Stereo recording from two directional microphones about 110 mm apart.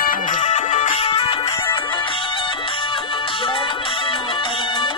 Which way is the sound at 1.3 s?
35° left (ahead or behind).